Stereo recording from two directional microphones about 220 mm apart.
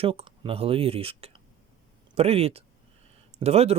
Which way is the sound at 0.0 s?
25° right (ahead or behind).